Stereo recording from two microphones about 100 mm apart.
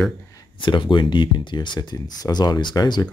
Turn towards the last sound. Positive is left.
turn(degrees=45)  # may be behind; listen again after turning